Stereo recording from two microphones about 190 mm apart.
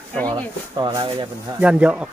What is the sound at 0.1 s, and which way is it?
Speech, 5° left (ahead or behind).